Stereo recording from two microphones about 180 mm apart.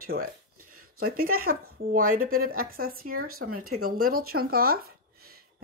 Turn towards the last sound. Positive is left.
turn(degrees=-55)  # may be behind; listen again after turning